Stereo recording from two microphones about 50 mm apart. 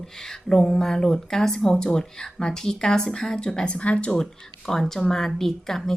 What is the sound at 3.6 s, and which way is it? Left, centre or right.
Speech, left.